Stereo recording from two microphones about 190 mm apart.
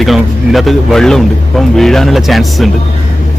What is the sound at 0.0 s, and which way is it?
A man's voice, centre (ahead or behind).